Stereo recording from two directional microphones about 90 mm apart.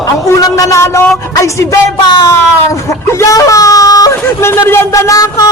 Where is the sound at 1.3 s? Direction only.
35° left (ahead or behind).